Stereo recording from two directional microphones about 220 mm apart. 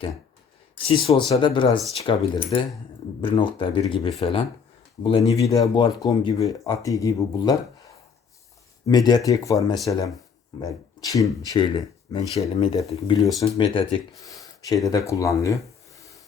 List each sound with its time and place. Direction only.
0.9 s speech: 25° left (ahead or behind)
8.9 s speech: 20° left (ahead or behind)
16.0 s rub: 15° left (ahead or behind)